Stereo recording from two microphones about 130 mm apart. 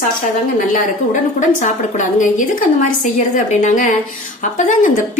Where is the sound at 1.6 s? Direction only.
75° left (ahead or behind).